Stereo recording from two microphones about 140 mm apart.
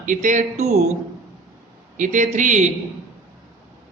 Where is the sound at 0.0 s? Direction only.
65° right (ahead or behind).